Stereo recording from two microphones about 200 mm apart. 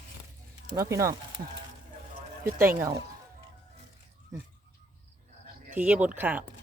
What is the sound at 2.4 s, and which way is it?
Speech, 10° right (ahead or behind).